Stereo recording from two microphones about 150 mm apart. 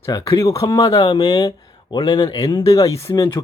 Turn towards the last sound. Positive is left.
turn(degrees=20)  # may be behind; listen again after turning